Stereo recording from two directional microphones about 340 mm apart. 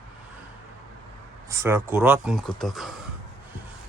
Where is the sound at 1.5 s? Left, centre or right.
Centre.